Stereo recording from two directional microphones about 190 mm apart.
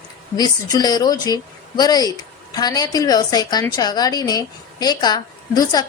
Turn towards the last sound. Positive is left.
turn(degrees=20)  # may be behind; listen again after turning